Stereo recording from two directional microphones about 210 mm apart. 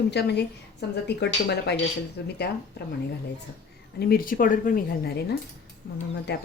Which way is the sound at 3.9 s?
45° left (ahead or behind).